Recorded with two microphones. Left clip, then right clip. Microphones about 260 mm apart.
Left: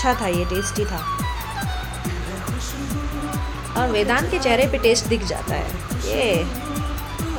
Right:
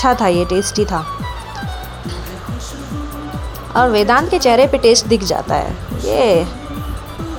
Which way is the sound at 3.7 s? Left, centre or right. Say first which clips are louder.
Right 8 dB; right.